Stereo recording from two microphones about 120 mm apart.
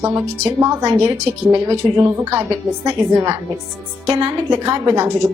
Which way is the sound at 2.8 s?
35° right (ahead or behind).